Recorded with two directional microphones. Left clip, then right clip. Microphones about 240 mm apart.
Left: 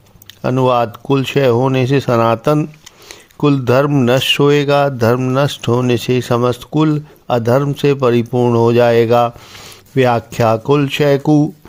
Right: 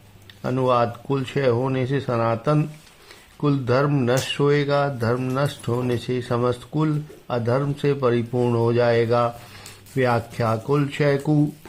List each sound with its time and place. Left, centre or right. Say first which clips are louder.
0.4 s speech: left 7 dB; left